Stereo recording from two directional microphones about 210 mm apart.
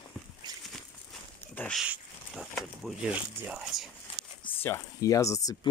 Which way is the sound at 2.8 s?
5° right (ahead or behind).